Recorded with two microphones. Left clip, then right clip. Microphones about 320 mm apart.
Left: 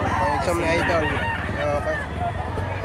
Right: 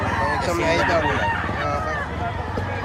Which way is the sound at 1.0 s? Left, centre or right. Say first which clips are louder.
Right 3 dB; right.